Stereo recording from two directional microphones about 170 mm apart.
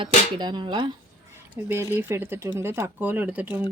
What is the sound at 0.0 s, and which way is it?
Speech, 25° right (ahead or behind).